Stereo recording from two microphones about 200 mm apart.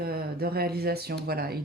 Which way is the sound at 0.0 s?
50° right (ahead or behind).